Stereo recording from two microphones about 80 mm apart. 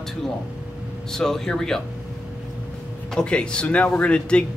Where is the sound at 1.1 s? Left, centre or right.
Centre.